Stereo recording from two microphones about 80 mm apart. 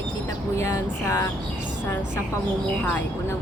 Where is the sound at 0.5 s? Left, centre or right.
Left.